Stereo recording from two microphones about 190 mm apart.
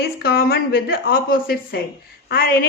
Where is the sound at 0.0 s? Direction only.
55° left (ahead or behind).